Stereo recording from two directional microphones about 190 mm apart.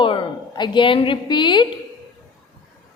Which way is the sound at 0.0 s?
25° left (ahead or behind).